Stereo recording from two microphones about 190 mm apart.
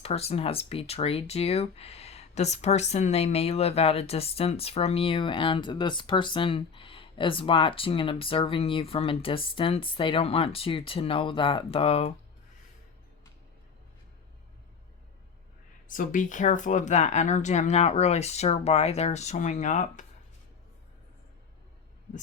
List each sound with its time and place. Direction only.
0.0 s speech: 30° left (ahead or behind)
15.9 s speech: 45° left (ahead or behind)